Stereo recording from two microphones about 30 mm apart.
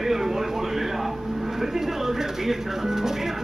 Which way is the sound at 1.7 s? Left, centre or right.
Centre.